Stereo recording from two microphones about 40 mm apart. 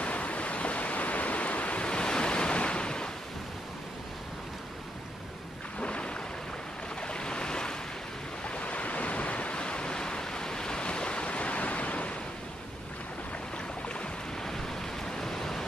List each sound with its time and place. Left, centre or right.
0.0 s pink noise: left
5.8 s a sound: left
7.0 s waves: left
8.5 s waves: left
14.4 s waves: centre